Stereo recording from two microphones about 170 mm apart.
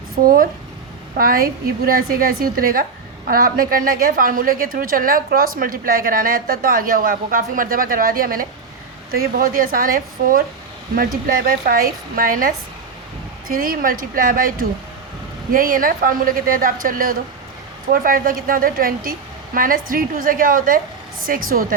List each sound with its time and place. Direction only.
1.1 s a woman's voice: 55° right (ahead or behind)